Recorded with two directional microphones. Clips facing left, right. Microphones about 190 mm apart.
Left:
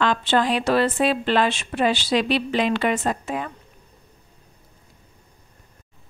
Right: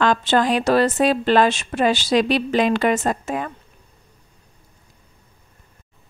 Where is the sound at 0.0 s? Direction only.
45° right (ahead or behind).